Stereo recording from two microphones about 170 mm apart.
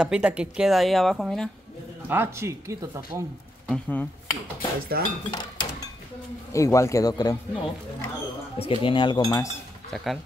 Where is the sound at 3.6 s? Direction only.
10° left (ahead or behind).